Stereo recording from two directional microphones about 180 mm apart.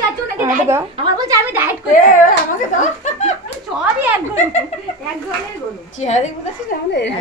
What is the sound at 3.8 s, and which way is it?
Speech, 10° right (ahead or behind).